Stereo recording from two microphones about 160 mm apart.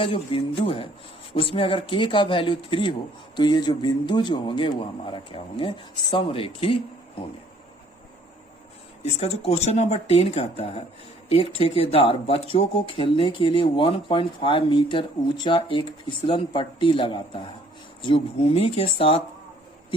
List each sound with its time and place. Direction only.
0.0 s a man's voice: 35° left (ahead or behind)
9.1 s a man's voice: 40° left (ahead or behind)